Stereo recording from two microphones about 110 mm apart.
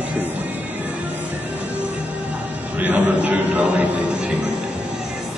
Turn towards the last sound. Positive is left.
turn(degrees=-15)  # may be behind; listen again after turning